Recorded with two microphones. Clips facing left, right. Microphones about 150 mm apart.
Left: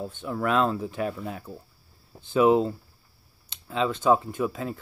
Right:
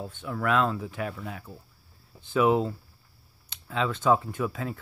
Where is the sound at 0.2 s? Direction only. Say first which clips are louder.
Left 1 dB; 30° left (ahead or behind).